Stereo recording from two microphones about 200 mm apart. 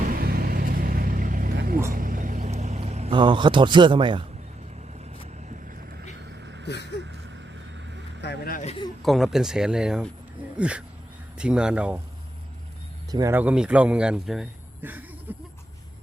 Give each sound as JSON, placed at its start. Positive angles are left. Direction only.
{"t": 0.0, "sound": "vehicle", "side_deg": -45}
{"t": 6.3, "sound": "vehicle", "side_deg": -60}
{"t": 8.2, "sound": "speech", "side_deg": 50}
{"t": 8.6, "sound": "speech", "side_deg": 30}
{"t": 9.0, "sound": "speech", "side_deg": 0}
{"t": 13.1, "sound": "speech", "side_deg": -15}